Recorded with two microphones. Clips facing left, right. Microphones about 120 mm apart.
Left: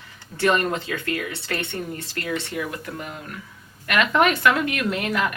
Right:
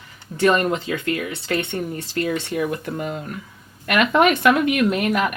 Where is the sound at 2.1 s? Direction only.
20° right (ahead or behind).